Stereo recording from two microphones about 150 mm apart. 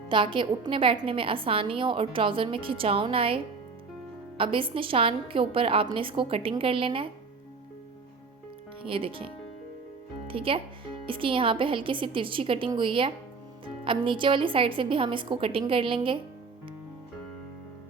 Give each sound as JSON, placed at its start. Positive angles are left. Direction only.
{"t": 0.1, "sound": "a woman's voice", "side_deg": -35}
{"t": 8.8, "sound": "a woman's voice", "side_deg": -35}